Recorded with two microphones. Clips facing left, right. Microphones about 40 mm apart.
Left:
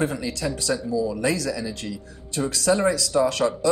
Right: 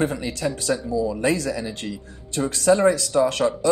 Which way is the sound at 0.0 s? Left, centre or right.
Right.